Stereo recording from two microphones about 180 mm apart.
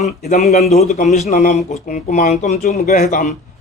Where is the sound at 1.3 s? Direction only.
55° left (ahead or behind).